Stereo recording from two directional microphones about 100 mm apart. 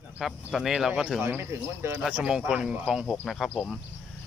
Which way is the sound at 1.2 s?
25° right (ahead or behind).